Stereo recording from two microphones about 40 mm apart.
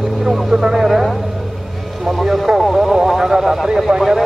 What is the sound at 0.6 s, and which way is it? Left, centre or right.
Vehicle, centre.